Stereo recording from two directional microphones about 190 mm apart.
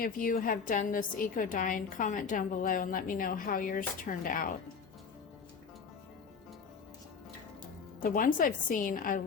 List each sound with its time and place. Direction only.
0.0 s a woman's voice: 50° left (ahead or behind)
8.0 s a woman's voice: 45° left (ahead or behind)